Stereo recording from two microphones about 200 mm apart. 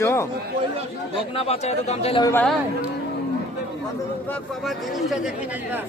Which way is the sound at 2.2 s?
10° left (ahead or behind).